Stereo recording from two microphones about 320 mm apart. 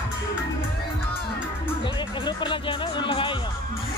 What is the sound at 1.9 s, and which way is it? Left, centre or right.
Speech, centre.